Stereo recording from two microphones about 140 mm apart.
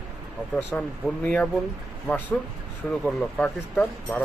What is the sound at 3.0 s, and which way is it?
Speech, 5° left (ahead or behind).